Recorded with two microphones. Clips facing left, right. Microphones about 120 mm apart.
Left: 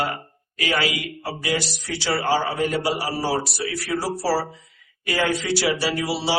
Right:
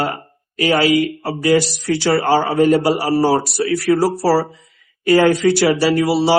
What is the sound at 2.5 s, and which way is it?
Speech, 40° right (ahead or behind).